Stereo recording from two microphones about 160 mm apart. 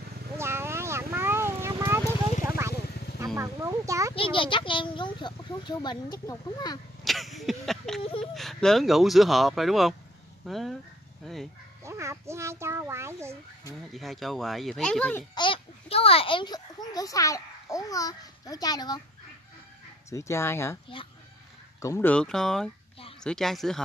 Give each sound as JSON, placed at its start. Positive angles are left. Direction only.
{"t": 0.4, "sound": "vehicle", "side_deg": -15}
{"t": 3.3, "sound": "a sound", "side_deg": -20}
{"t": 4.1, "sound": "a child's voice", "side_deg": 35}
{"t": 7.1, "sound": "speech", "side_deg": 0}
{"t": 8.0, "sound": "a sound", "side_deg": 35}
{"t": 8.4, "sound": "speech", "side_deg": 0}
{"t": 11.3, "sound": "bow-wow", "side_deg": 0}
{"t": 11.8, "sound": "a sound", "side_deg": -15}
{"t": 13.9, "sound": "speech", "side_deg": 0}
{"t": 15.3, "sound": "a child's voice", "side_deg": 30}
{"t": 20.1, "sound": "speech", "side_deg": 20}
{"t": 21.8, "sound": "speech", "side_deg": 20}
{"t": 22.1, "sound": "speech", "side_deg": 5}